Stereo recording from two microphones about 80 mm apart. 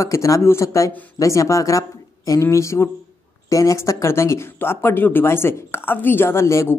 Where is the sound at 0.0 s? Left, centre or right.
Left.